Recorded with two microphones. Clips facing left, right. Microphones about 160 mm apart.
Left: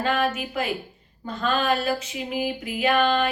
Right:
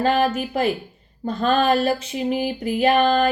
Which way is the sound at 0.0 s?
35° right (ahead or behind).